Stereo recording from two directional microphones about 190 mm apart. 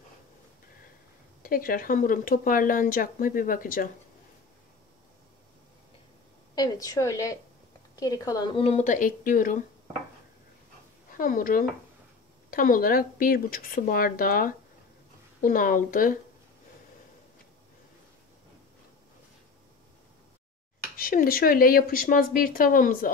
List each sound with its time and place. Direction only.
1.4 s speech: 50° left (ahead or behind)
6.5 s speech: 20° left (ahead or behind); by 9.6 s 45° left (ahead or behind)
11.1 s speech: 45° left (ahead or behind)
20.9 s speech: 50° left (ahead or behind)